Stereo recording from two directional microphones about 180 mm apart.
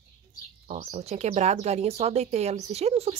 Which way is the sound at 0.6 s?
35° right (ahead or behind).